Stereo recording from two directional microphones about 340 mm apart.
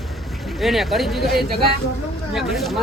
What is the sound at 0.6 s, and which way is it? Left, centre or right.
Speech, centre.